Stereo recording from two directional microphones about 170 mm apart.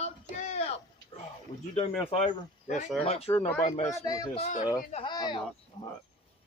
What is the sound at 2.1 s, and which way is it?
Speech, 45° left (ahead or behind).